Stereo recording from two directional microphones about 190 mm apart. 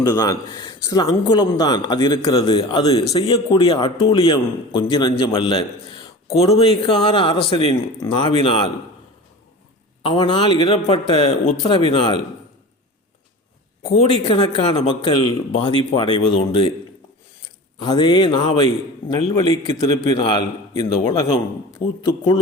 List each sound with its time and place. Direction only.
0.2 s speech: 20° left (ahead or behind)
10.0 s speech: 25° left (ahead or behind)
13.9 s speech: 35° left (ahead or behind)
17.8 s speech: 20° left (ahead or behind)